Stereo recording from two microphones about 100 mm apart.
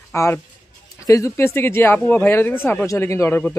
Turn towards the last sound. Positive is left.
turn(degrees=25)  # may be behind; listen again after turning